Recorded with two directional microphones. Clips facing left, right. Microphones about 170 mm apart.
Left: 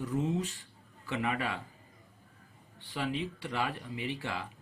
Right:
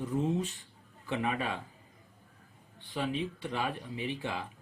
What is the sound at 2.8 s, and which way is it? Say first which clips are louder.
Speech: right 1 dB; 20° right (ahead or behind).